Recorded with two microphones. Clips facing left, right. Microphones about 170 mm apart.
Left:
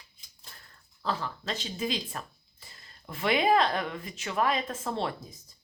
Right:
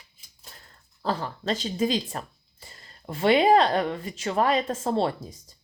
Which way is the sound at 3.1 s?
30° right (ahead or behind).